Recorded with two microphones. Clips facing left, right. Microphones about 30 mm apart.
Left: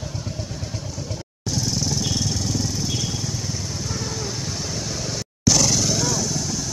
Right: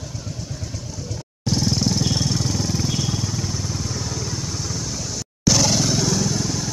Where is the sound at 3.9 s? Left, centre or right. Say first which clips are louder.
Even; centre.